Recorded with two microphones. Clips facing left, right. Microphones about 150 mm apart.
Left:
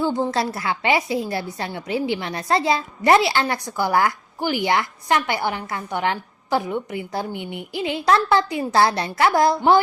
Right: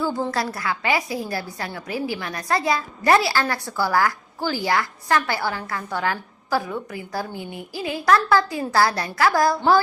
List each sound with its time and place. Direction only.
0.0 s a woman's voice: 20° left (ahead or behind)